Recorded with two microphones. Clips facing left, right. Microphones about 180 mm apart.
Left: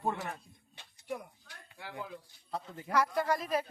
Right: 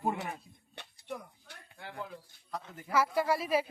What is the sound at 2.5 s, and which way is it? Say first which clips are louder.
Speech: left 2 dB; 30° left (ahead or behind).